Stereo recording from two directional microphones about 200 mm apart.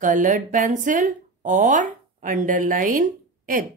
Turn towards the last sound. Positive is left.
turn(degrees=-45)  # may be behind; listen again after turning